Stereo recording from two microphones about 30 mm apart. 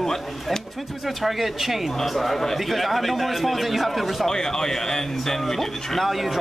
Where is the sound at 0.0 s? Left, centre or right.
Centre.